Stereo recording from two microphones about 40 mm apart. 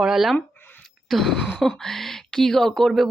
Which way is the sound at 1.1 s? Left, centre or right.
Centre.